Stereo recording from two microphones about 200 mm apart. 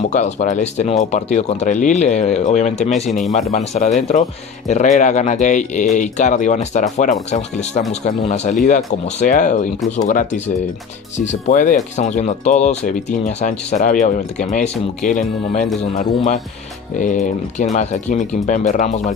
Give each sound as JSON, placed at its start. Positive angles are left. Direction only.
{"t": 0.1, "sound": "speech", "side_deg": 35}
{"t": 2.9, "sound": "speech", "side_deg": 0}
{"t": 3.5, "sound": "speech", "side_deg": 35}
{"t": 17.0, "sound": "speech", "side_deg": 40}